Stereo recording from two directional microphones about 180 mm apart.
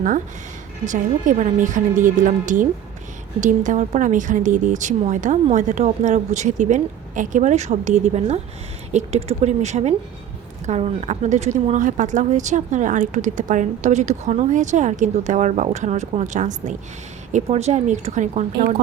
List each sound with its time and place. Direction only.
0.9 s a woman's voice: 45° right (ahead or behind)